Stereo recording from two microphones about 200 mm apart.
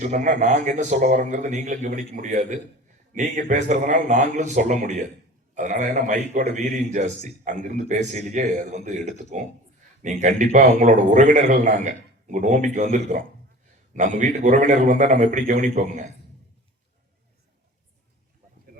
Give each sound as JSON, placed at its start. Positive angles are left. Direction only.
{"t": 0.0, "sound": "a man's voice", "side_deg": -40}